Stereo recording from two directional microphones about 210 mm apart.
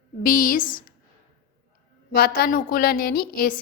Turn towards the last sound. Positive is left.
turn(degrees=45)  # may be behind; listen again after turning